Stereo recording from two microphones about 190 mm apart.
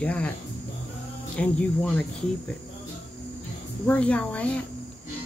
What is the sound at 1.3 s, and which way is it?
Speech, 5° left (ahead or behind).